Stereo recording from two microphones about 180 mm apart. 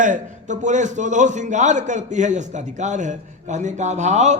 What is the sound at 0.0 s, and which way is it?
A man's voice, 45° right (ahead or behind).